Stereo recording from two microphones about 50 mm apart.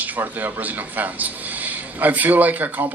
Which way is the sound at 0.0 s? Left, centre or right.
Right.